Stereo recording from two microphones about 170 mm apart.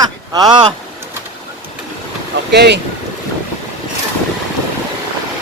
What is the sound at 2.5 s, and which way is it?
Speech, 85° right.